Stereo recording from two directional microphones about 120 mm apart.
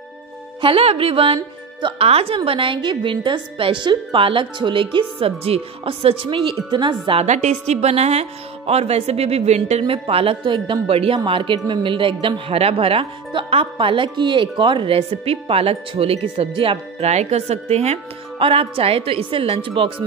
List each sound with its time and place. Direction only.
0.6 s speech: 50° right (ahead or behind)
7.2 s a woman's voice: 80° right; by 17.1 s 50° right (ahead or behind)
17.1 s a woman's voice: 70° right (ahead or behind)
18.4 s speech: 50° right (ahead or behind)